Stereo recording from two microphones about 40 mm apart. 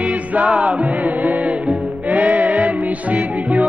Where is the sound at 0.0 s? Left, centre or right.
Right.